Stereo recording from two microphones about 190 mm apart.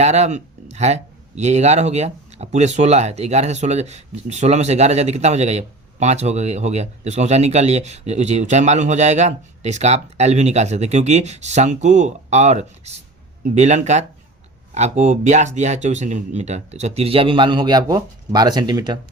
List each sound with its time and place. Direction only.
0.0 s a man's voice: 35° right (ahead or behind)